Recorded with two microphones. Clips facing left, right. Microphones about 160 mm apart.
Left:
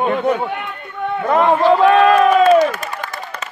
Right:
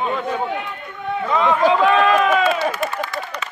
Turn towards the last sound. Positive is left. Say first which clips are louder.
# right 1 dB
turn(degrees=45)  # may be behind; listen again after turning